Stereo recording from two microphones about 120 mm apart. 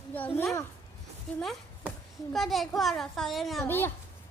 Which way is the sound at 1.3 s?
5° left (ahead or behind).